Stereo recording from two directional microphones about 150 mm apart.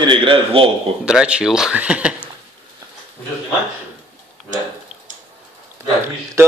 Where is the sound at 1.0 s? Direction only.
5° right (ahead or behind).